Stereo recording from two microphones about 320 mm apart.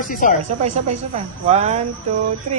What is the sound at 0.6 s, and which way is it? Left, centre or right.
Speech, centre.